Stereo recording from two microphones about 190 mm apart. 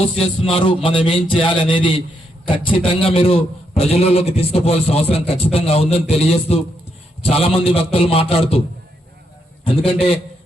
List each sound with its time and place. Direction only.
0.0 s music: 30° left (ahead or behind)
2.6 s a man's voice: 30° left (ahead or behind)
9.6 s music: 30° left (ahead or behind)